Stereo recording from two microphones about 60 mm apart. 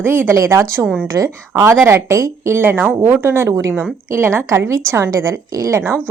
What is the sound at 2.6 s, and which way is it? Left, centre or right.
A woman's voice, right.